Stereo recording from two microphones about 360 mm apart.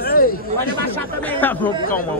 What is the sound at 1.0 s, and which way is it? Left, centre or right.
Speech, centre.